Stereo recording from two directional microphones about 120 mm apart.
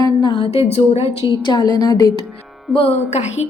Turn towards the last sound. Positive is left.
turn(degrees=65)  # may be behind; listen again after turning